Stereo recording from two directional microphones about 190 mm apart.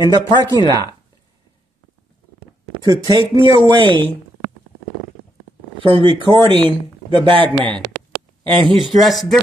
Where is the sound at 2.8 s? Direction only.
20° right (ahead or behind).